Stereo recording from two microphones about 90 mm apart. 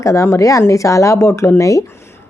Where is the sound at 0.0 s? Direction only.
35° left (ahead or behind).